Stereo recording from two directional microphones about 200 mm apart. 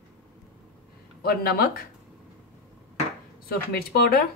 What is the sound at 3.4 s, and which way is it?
Speech, 50° left (ahead or behind).